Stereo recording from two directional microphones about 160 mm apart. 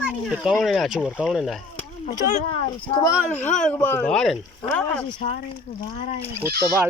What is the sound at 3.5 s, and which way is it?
Speech, 10° left (ahead or behind).